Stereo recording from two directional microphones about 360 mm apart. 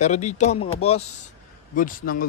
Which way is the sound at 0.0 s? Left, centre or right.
Centre.